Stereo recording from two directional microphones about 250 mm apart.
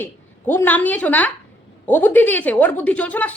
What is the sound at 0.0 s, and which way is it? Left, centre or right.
A woman's voice, centre.